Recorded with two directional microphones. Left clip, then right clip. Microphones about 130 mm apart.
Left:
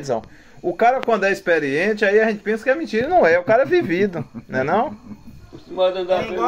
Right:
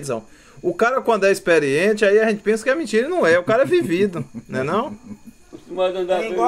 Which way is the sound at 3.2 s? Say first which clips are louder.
Left 2 dB; 30° right (ahead or behind).